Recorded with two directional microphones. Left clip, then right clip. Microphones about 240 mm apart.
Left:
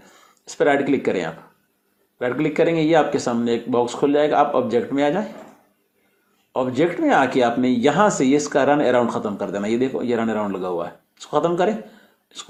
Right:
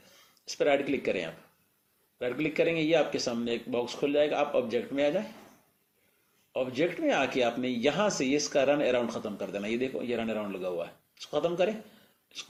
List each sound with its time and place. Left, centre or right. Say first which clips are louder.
0.4 s speech: left 8 dB; left
6.5 s speech: left 9 dB; centre